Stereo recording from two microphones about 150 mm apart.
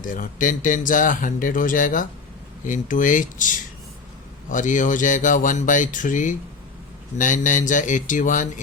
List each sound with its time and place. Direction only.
0.0 s speech: 60° left (ahead or behind)